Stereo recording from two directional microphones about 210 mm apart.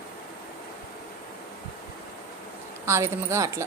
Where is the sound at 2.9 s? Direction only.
15° right (ahead or behind).